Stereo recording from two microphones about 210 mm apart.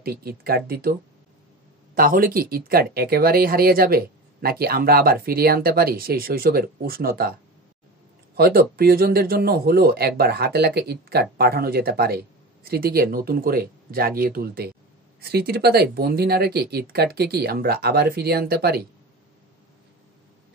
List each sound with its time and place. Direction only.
0.0 s speech: 45° right (ahead or behind)
2.0 s speech: 45° right (ahead or behind)
8.4 s speech: 45° right (ahead or behind)